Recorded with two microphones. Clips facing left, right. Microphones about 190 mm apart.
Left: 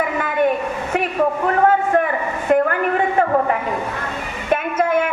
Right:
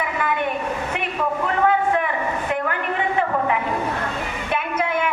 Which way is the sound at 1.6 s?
45° left (ahead or behind).